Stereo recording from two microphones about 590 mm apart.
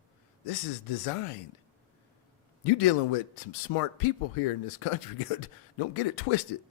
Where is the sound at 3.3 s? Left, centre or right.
Left.